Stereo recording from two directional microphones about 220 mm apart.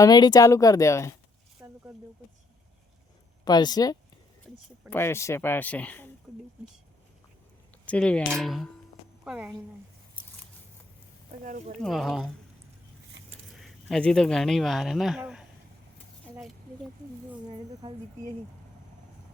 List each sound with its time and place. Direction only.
0.0 s speech: 20° left (ahead or behind)
1.6 s a sound: 10° right (ahead or behind)
3.4 s speech: 20° left (ahead or behind)
7.9 s speech: 5° left (ahead or behind)
11.4 s speech: 35° right (ahead or behind)
11.8 s speech: centre (ahead or behind)
13.5 s speech: centre (ahead or behind)